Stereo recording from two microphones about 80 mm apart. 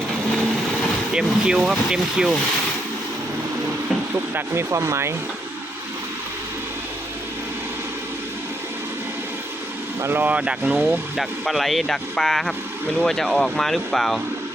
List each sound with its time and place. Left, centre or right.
1.1 s speech: centre
4.4 s speech: right
10.0 s speech: right
10.8 s speech: centre